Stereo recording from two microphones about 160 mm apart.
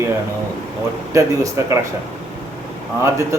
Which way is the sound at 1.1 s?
20° right (ahead or behind).